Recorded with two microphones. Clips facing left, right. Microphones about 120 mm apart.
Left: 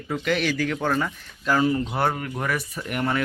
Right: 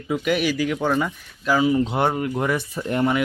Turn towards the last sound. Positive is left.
turn(degrees=-25)  # may be behind; listen again after turning